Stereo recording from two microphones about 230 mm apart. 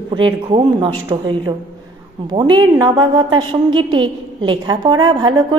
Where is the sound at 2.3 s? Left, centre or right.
Centre.